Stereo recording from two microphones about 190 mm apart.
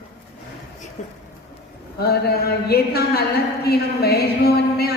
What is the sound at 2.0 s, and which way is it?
A woman's voice, 55° left (ahead or behind).